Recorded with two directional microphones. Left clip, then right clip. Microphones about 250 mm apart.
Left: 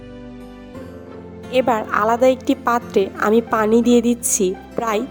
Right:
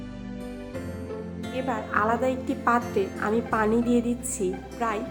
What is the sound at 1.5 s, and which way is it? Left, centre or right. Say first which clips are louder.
A woman's voice: left 10 dB; left.